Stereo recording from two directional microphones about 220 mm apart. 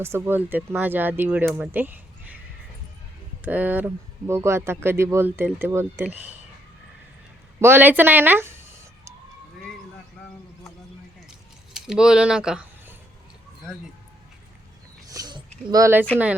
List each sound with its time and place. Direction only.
0.2 s speech: 10° right (ahead or behind)
3.4 s speech: 10° right (ahead or behind)
7.6 s speech: 10° right (ahead or behind)
11.3 s a sound: 5° right (ahead or behind)
15.0 s a sound: 15° right (ahead or behind)
15.7 s speech: 10° right (ahead or behind)